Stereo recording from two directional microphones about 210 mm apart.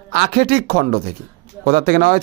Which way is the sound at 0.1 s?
50° right (ahead or behind).